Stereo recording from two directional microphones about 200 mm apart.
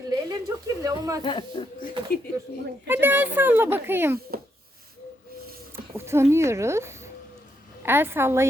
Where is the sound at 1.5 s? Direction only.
25° left (ahead or behind).